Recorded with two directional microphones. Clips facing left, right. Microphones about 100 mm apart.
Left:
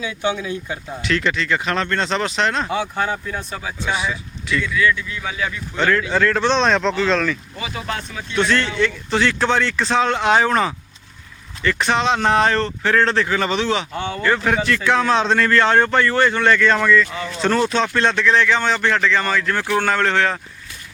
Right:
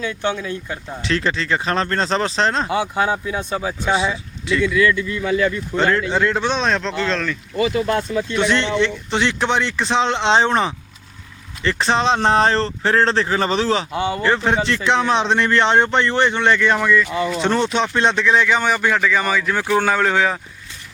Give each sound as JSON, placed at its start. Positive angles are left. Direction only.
{"t": 0.0, "sound": "speech", "side_deg": 10}
{"t": 1.0, "sound": "speech", "side_deg": -30}
{"t": 2.6, "sound": "speech", "side_deg": -5}
{"t": 3.5, "sound": "a man's voice", "side_deg": -35}
{"t": 5.7, "sound": "speech", "side_deg": -35}
{"t": 6.1, "sound": "speech", "side_deg": -15}
{"t": 8.4, "sound": "a man's voice", "side_deg": -20}
{"t": 13.9, "sound": "speech", "side_deg": -5}
{"t": 14.2, "sound": "a man's voice", "side_deg": -25}